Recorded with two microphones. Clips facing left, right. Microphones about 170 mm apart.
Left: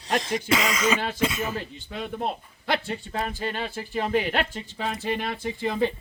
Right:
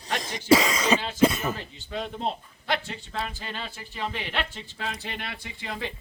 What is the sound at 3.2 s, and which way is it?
A man's voice, 45° left (ahead or behind).